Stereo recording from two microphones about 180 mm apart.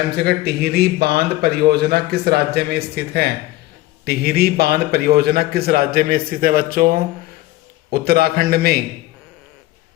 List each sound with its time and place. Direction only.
0.2 s speech: 60° right (ahead or behind)